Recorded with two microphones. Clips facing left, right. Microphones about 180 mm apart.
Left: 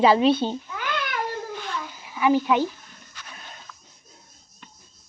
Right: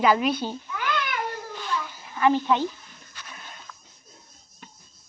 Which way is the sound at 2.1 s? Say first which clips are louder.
Left 1 dB; 10° left (ahead or behind).